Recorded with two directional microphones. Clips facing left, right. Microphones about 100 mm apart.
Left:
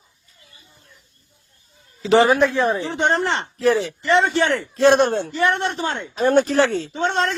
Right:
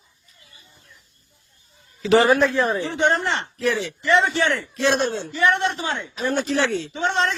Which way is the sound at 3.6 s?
35° left (ahead or behind).